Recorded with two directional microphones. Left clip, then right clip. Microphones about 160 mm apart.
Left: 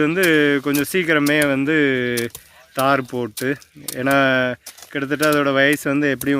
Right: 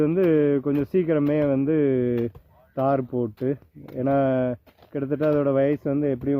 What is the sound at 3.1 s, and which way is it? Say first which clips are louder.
Speech: left 2 dB; 55° left (ahead or behind).